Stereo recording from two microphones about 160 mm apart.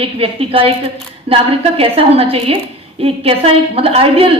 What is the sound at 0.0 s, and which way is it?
A woman's voice, 35° right (ahead or behind).